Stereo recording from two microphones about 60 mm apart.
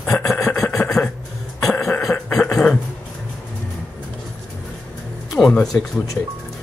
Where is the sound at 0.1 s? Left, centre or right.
Left.